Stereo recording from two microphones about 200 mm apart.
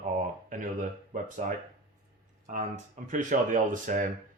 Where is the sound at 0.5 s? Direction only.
40° right (ahead or behind).